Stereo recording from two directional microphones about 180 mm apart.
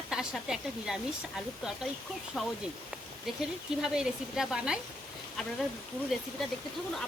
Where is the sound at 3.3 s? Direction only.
Centre (ahead or behind).